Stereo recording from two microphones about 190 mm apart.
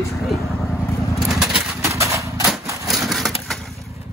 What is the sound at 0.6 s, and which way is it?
Vehicle, 15° left (ahead or behind).